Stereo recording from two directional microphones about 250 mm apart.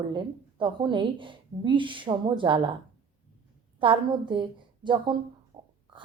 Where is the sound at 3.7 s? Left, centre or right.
Centre.